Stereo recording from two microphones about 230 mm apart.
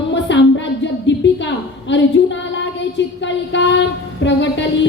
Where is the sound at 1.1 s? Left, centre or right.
Left.